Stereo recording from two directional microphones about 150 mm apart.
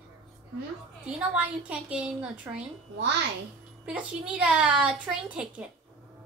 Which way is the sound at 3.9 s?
10° right (ahead or behind).